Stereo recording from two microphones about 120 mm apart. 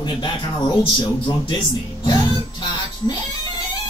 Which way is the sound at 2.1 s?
40° left (ahead or behind).